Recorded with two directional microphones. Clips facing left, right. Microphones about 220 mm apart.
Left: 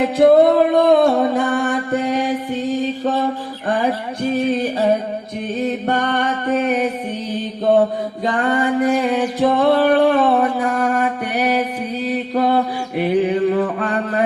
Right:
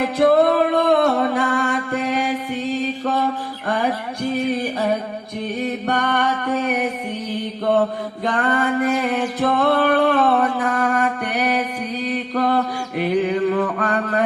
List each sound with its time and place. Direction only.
0.0 s music: 20° left (ahead or behind)
5.8 s music: 25° left (ahead or behind)
7.6 s mantra: 15° left (ahead or behind)